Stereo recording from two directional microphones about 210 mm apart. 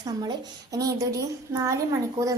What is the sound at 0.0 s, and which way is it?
A woman's voice, 20° right (ahead or behind).